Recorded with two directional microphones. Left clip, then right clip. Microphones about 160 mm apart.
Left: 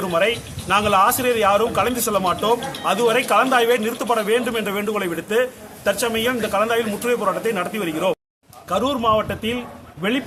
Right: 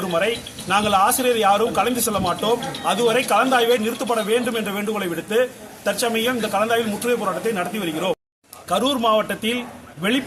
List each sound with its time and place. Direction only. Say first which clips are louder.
0.0 s a man's voice: left 2 dB; 10° left (ahead or behind)